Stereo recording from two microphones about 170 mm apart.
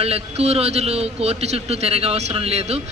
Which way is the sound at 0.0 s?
35° right (ahead or behind).